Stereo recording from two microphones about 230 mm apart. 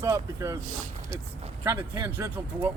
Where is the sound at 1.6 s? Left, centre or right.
Centre.